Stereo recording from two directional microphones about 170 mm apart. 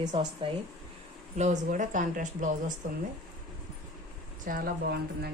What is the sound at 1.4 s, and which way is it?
Speech, 45° right (ahead or behind).